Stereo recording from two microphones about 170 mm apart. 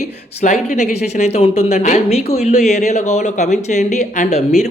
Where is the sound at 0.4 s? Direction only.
45° left (ahead or behind).